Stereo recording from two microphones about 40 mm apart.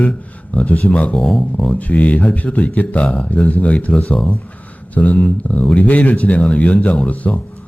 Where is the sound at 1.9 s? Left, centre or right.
Left.